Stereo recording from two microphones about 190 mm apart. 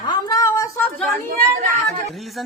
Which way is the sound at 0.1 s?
20° left (ahead or behind).